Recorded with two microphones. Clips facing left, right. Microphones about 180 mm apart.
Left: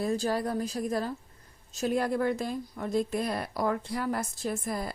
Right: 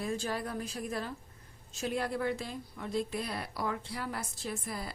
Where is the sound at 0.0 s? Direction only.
40° left (ahead or behind).